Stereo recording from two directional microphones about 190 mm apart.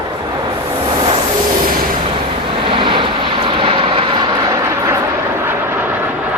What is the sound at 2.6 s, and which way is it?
Vehicle, 25° right (ahead or behind).